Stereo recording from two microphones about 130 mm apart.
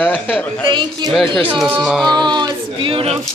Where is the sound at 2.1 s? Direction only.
35° right (ahead or behind).